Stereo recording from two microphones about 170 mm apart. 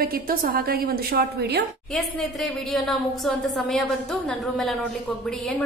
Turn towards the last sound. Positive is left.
turn(degrees=0)  # may be behind; listen again after turning